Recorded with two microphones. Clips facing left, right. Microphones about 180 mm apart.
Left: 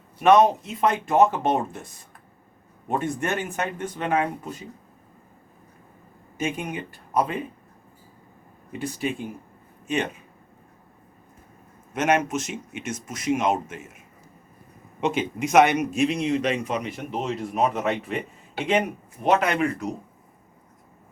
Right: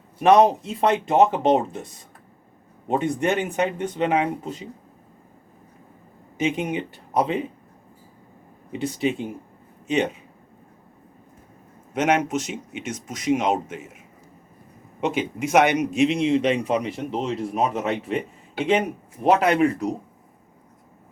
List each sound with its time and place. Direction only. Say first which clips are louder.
0.2 s a man's voice: right 1 dB; 35° right (ahead or behind)
2.8 s a man's voice: right 4 dB; 20° right (ahead or behind)
6.3 s a man's voice: right 5 dB; 20° right (ahead or behind)
8.8 s a man's voice: right 4 dB; 20° right (ahead or behind)
11.9 s speech: right 1 dB; 15° right (ahead or behind)
15.0 s a man's voice: even; 10° right (ahead or behind); by 18.2 s 30° right (ahead or behind)
19.2 s speech: right 4 dB; 35° right (ahead or behind)